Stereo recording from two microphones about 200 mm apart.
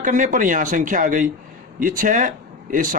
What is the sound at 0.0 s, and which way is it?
Speech, 40° right (ahead or behind).